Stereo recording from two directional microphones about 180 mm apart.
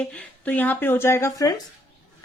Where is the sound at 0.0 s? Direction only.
5° left (ahead or behind).